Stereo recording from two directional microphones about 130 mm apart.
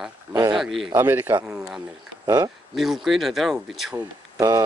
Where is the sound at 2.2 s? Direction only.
30° right (ahead or behind).